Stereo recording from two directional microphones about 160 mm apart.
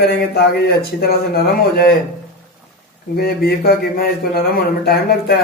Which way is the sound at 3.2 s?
75° left (ahead or behind).